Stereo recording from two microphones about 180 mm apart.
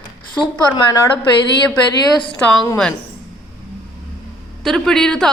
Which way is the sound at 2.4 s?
5° left (ahead or behind).